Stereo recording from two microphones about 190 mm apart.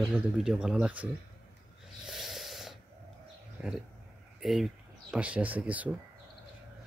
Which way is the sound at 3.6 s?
5° right (ahead or behind).